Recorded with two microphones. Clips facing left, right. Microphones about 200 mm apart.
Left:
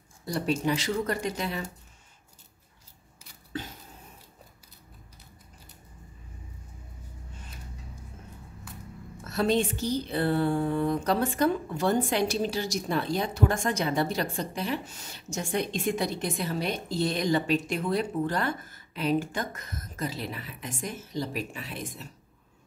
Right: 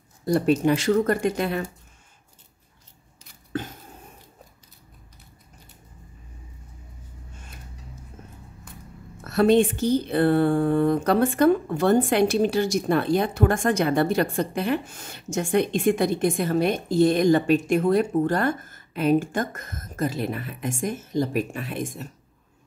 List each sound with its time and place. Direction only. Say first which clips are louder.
0.2 s a woman's voice: right 8 dB; 50° right (ahead or behind)
3.5 s a sound: right 6 dB; 50° right (ahead or behind)
9.2 s a woman's voice: right 8 dB; 60° right (ahead or behind)